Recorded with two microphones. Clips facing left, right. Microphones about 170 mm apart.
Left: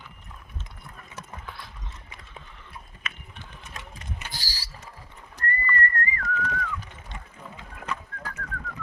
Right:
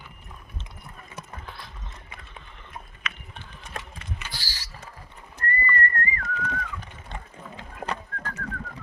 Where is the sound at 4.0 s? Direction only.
45° left (ahead or behind).